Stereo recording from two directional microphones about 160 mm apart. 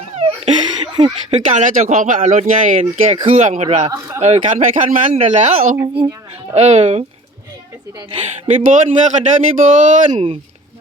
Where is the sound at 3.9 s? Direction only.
20° right (ahead or behind).